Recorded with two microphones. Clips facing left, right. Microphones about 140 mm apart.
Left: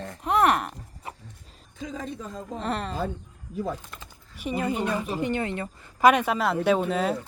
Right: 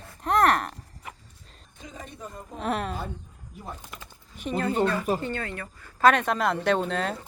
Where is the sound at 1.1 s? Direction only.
30° left (ahead or behind).